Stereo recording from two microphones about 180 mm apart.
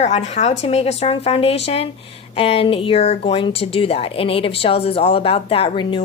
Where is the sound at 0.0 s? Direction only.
40° left (ahead or behind).